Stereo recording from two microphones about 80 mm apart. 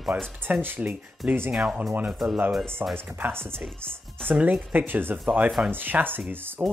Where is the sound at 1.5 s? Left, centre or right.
Centre.